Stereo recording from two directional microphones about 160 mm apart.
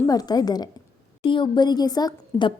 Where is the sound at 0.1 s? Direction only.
25° left (ahead or behind).